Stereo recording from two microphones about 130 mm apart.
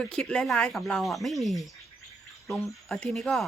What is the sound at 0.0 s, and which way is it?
Speech, 5° left (ahead or behind).